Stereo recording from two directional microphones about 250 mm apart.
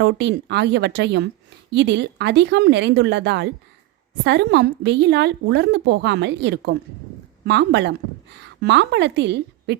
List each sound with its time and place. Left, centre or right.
0.0 s a woman's voice: right